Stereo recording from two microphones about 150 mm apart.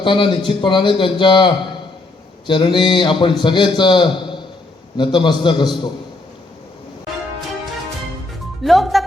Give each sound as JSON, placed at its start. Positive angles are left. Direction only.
{"t": 0.0, "sound": "a man's voice", "side_deg": 35}
{"t": 8.6, "sound": "speech", "side_deg": 0}